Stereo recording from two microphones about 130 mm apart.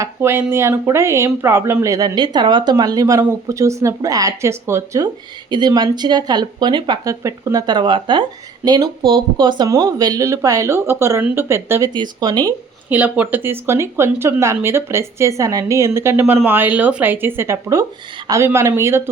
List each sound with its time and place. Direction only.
0.0 s speech: 15° right (ahead or behind)
5.5 s speech: 35° right (ahead or behind)
7.7 s speech: 35° right (ahead or behind); by 11.9 s 20° right (ahead or behind)
11.9 s speech: 30° right (ahead or behind)
12.9 s speech: 10° right (ahead or behind)